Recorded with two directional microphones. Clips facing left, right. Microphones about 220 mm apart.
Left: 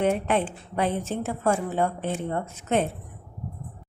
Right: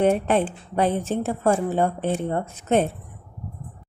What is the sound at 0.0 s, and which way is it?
A woman's voice, 35° right (ahead or behind).